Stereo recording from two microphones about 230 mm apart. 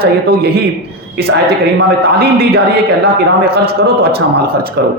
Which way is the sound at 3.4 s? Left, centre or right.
Right.